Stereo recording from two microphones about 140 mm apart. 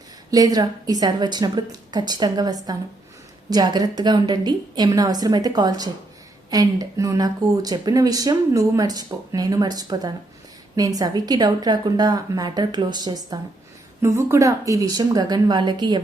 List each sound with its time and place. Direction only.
0.3 s a woman's voice: 25° right (ahead or behind)
14.0 s a woman's voice: 20° right (ahead or behind)